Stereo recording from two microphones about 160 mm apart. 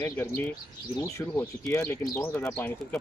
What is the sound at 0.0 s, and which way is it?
Speech, 10° left (ahead or behind).